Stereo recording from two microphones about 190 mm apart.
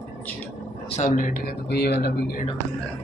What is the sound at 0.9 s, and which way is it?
Speech, 40° left (ahead or behind).